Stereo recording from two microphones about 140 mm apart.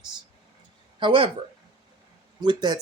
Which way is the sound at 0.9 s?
35° right (ahead or behind).